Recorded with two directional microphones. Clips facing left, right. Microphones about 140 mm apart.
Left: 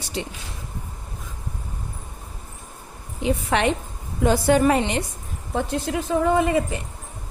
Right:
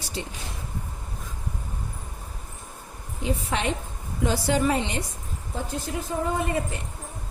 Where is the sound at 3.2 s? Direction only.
70° left (ahead or behind).